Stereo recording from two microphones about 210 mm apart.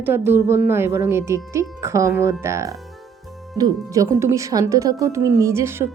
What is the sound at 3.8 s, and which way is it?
A woman's voice, 15° right (ahead or behind).